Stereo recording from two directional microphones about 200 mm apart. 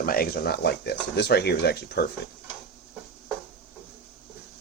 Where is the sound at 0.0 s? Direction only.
50° left (ahead or behind).